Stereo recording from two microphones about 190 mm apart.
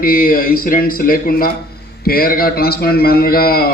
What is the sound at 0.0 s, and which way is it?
Speech, 50° left (ahead or behind).